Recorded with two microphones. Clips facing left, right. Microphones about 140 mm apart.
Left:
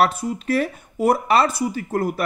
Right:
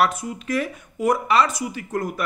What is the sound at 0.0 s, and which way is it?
Speech, 30° left (ahead or behind).